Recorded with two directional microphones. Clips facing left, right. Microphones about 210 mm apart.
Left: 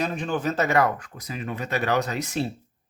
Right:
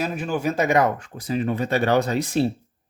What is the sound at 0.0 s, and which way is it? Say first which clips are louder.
Speech: right 2 dB; 5° right (ahead or behind).